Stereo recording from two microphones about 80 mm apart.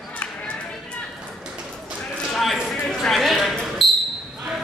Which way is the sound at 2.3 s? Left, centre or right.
Centre.